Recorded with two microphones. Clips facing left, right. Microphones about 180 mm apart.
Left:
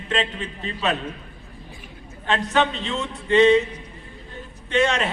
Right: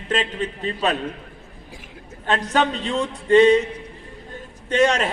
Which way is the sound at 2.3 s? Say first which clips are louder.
Right 1 dB; 45° right (ahead or behind).